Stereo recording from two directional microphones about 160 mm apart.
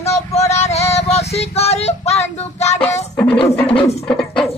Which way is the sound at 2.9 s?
15° left (ahead or behind).